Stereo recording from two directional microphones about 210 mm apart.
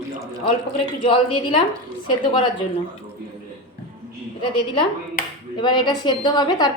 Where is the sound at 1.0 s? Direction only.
25° left (ahead or behind).